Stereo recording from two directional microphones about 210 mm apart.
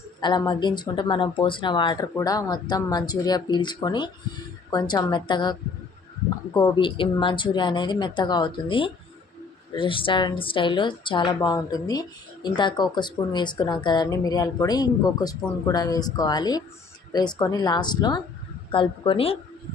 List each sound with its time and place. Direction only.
0.2 s a woman's voice: 20° left (ahead or behind)